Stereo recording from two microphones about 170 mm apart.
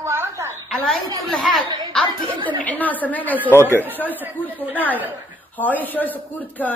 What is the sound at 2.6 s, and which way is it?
Speech, 10° left (ahead or behind).